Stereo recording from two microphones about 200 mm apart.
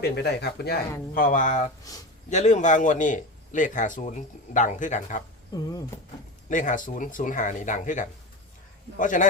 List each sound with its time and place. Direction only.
0.0 s speech: 55° left (ahead or behind)
1.1 s a man's voice: 45° left (ahead or behind)
5.5 s a sound: 20° left (ahead or behind)
6.5 s a man's voice: 40° left (ahead or behind)